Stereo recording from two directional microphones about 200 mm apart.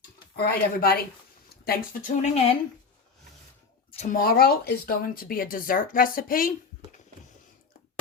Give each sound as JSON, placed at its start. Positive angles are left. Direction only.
{"t": 0.3, "sound": "speech", "side_deg": 50}
{"t": 3.9, "sound": "speech", "side_deg": 40}